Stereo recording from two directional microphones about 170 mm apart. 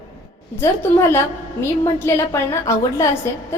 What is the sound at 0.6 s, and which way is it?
A woman's voice, 15° left (ahead or behind).